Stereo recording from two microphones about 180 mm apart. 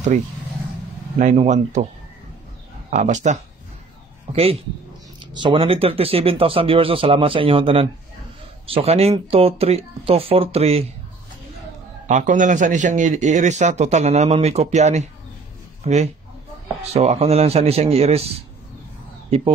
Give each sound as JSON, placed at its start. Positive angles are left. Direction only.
{"t": 1.1, "sound": "speech", "side_deg": -40}
{"t": 2.9, "sound": "speech", "side_deg": -45}
{"t": 12.1, "sound": "speech", "side_deg": -45}